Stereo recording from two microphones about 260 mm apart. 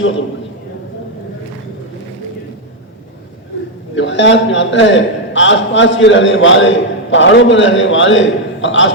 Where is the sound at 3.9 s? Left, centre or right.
Left.